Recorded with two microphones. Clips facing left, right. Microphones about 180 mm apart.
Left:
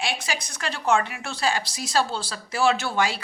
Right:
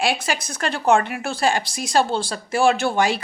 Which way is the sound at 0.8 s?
30° right (ahead or behind).